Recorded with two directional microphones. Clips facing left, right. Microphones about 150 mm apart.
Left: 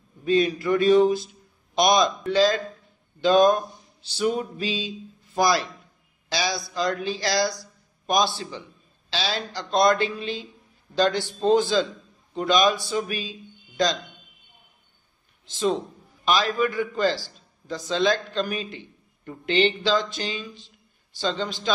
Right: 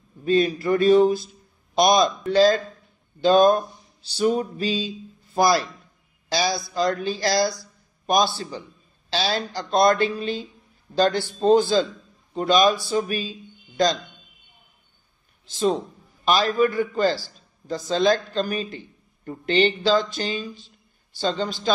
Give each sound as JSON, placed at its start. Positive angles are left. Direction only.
{"t": 0.2, "sound": "speech", "side_deg": -35}
{"t": 16.3, "sound": "speech", "side_deg": -40}